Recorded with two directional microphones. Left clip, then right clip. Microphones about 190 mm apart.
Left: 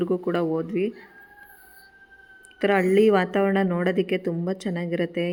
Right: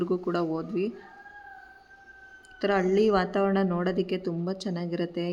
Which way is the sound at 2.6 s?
20° left (ahead or behind).